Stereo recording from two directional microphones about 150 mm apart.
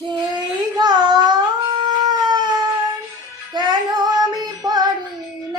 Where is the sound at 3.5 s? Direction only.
30° right (ahead or behind).